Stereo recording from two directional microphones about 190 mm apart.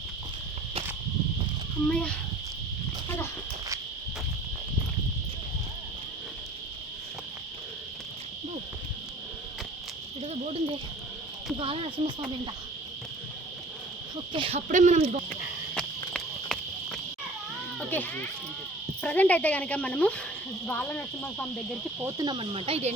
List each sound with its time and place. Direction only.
1.9 s speech: 5° left (ahead or behind)
10.2 s insect: 30° right (ahead or behind)
11.5 s speech: 30° right (ahead or behind)
14.3 s speech: 30° right (ahead or behind)
14.7 s speech: 40° right (ahead or behind)
16.1 s clip-clop: centre (ahead or behind)
17.7 s a child's voice: 10° left (ahead or behind)
22.0 s speech: 20° right (ahead or behind)